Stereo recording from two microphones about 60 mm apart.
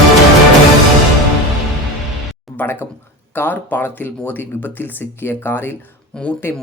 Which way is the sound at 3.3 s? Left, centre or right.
Left.